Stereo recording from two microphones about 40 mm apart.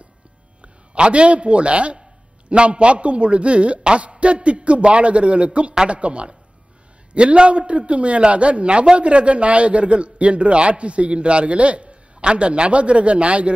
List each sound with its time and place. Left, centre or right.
0.6 s a man's voice: right